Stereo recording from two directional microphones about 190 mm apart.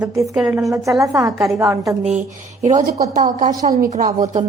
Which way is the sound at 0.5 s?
15° right (ahead or behind).